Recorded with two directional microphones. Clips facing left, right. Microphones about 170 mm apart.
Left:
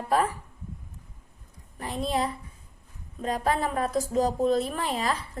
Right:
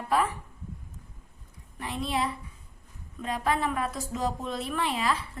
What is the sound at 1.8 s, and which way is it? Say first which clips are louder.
A woman's voice: left 2 dB; 40° left (ahead or behind).